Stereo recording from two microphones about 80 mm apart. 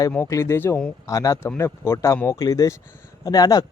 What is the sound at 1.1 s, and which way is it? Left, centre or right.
Speech, left.